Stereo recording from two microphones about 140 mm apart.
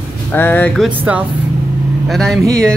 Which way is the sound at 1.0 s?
10° right (ahead or behind).